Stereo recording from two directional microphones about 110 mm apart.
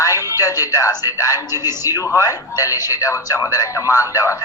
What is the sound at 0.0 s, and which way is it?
A man's voice, 30° left (ahead or behind).